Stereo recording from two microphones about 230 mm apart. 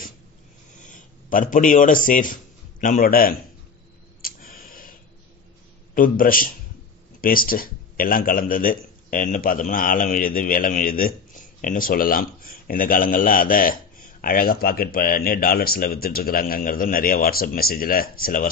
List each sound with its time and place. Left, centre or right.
0.8 s a man's voice: left
4.2 s a sound: left
5.9 s a man's voice: left